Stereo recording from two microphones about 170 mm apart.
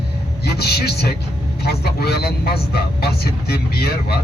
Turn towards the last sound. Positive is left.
turn(degrees=70)  # may be behind; listen again after turning